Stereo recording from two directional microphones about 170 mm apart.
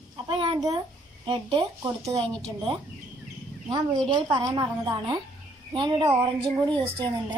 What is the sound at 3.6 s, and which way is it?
Speech, 25° right (ahead or behind).